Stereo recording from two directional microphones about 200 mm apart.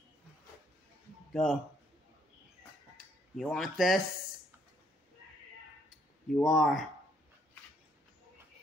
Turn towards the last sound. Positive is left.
turn(degrees=0)  # may be behind; listen again after turning